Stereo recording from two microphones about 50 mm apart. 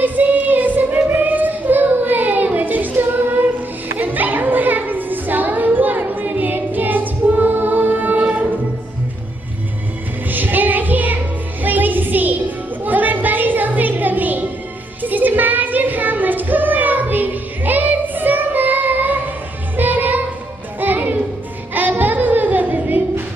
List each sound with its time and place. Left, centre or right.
0.0 s child singing: right
10.3 s child singing: right
11.6 s a sound: right
15.0 s music: right